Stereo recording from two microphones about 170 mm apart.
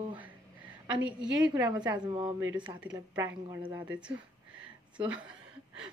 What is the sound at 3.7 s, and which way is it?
Speech, 10° right (ahead or behind).